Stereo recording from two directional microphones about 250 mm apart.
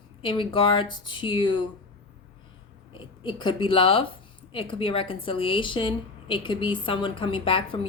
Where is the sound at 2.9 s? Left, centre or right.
Centre.